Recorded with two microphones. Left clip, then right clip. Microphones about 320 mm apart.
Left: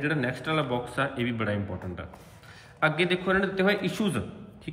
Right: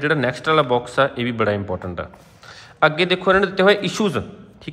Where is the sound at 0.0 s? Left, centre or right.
Centre.